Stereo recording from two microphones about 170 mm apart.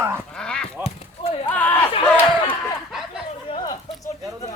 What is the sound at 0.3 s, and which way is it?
Goose, 5° left (ahead or behind).